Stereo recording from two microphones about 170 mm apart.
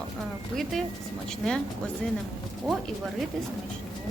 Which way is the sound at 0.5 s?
Centre (ahead or behind).